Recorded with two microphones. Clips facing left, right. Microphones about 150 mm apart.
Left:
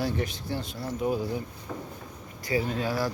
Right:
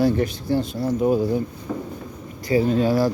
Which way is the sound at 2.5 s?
30° right (ahead or behind).